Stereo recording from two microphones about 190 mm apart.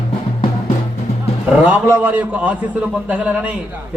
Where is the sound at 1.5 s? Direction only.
5° right (ahead or behind).